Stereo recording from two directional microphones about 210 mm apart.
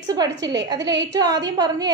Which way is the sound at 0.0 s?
20° right (ahead or behind).